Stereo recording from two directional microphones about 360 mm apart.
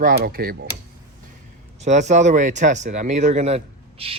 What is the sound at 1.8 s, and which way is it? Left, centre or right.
Speech, centre.